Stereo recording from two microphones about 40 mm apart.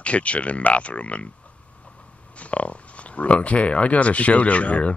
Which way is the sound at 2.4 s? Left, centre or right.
Left.